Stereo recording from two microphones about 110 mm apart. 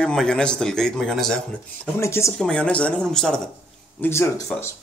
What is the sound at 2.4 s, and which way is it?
Speech, 5° left (ahead or behind).